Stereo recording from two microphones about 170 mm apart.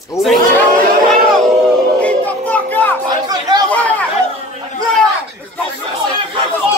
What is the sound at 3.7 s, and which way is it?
Chatter, 10° left (ahead or behind).